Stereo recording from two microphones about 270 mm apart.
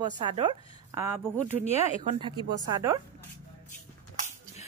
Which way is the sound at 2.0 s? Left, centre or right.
Centre.